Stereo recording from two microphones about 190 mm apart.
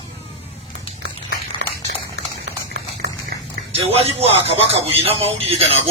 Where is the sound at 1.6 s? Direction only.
75° right (ahead or behind).